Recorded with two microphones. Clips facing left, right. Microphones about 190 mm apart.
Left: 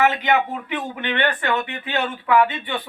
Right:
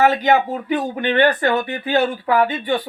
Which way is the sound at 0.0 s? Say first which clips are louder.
Right 4 dB; 40° right (ahead or behind).